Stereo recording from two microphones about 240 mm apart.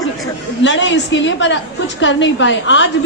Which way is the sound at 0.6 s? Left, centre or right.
Left.